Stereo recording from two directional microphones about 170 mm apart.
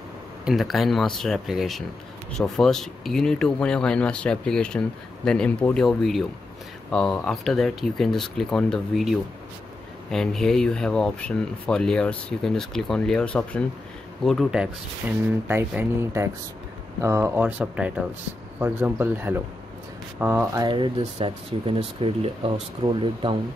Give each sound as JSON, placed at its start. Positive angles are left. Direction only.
{"t": 0.5, "sound": "speech", "side_deg": 0}
{"t": 10.1, "sound": "speech", "side_deg": 0}
{"t": 20.6, "sound": "speech", "side_deg": -30}